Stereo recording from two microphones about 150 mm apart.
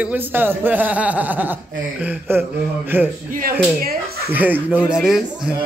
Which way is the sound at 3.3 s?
70° right (ahead or behind).